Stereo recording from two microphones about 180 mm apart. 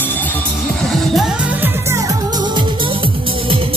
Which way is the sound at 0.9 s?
Centre (ahead or behind).